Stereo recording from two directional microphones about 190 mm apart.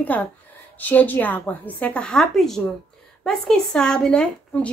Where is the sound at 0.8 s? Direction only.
10° left (ahead or behind).